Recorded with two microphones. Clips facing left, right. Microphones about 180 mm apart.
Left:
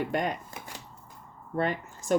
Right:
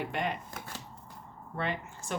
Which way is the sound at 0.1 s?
40° left (ahead or behind).